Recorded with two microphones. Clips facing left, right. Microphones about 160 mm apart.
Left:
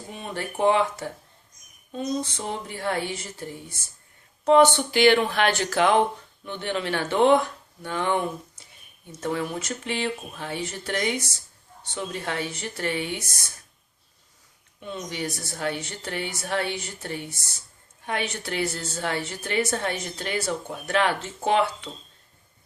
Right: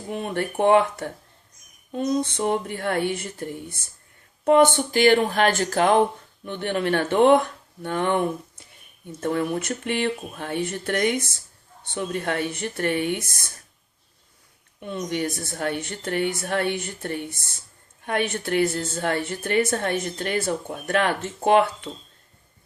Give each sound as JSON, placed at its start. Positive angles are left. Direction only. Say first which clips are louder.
{"t": 0.1, "sound": "a woman's voice", "louder": "right 7 dB", "side_deg": -60}
{"t": 14.8, "sound": "a woman's voice", "louder": "right 5 dB", "side_deg": -55}